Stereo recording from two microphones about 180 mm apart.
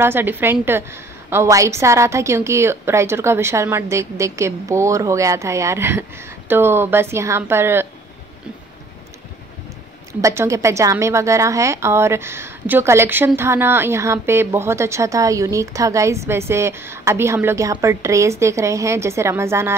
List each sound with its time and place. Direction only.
0.0 s a woman's voice: 10° right (ahead or behind)
10.2 s a woman's voice: 15° right (ahead or behind)